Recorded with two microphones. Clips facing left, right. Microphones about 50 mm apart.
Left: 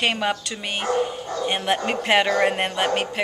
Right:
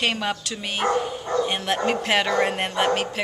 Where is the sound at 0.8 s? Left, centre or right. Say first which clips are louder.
Even; right.